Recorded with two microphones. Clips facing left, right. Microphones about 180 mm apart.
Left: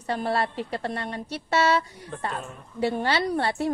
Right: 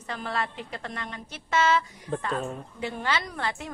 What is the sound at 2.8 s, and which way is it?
Speech, 35° left (ahead or behind).